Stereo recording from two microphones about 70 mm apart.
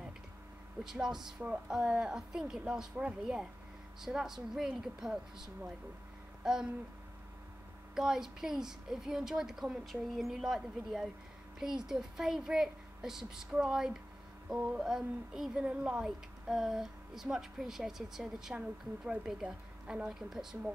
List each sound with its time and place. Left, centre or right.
0.8 s speech: centre
6.4 s a sound: centre
7.9 s speech: centre
14.5 s mantra: centre
14.8 s speech: centre